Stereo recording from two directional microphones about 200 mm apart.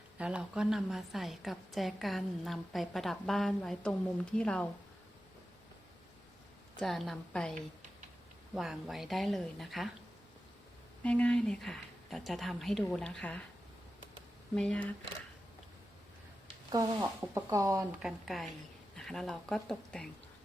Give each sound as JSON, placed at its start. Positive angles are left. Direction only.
{"t": 0.2, "sound": "a woman's voice", "side_deg": -5}
{"t": 6.7, "sound": "a woman's voice", "side_deg": 0}
{"t": 8.5, "sound": "a woman's voice", "side_deg": 0}
{"t": 11.0, "sound": "a woman's voice", "side_deg": 5}
{"t": 14.5, "sound": "a woman's voice", "side_deg": 5}
{"t": 16.7, "sound": "speech", "side_deg": -15}
{"t": 18.0, "sound": "a woman's voice", "side_deg": 0}